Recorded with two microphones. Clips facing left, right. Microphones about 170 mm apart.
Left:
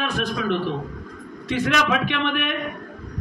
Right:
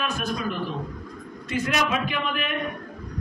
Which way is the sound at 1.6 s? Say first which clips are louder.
Left 4 dB; 80° left.